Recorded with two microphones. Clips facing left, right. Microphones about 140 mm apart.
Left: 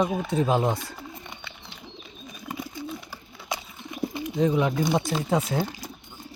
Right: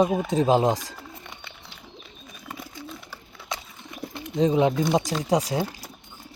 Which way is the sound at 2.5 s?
Centre (ahead or behind).